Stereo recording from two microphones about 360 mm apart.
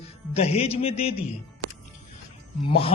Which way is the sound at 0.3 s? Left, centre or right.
Centre.